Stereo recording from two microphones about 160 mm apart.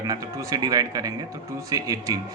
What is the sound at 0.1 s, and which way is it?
A man's voice, 20° right (ahead or behind).